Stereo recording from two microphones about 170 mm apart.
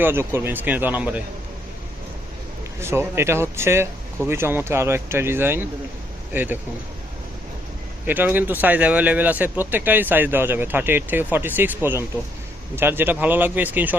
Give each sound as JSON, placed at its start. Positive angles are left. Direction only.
{"t": 0.0, "sound": "speech", "side_deg": -15}
{"t": 2.8, "sound": "speech", "side_deg": -15}
{"t": 8.0, "sound": "speech", "side_deg": -10}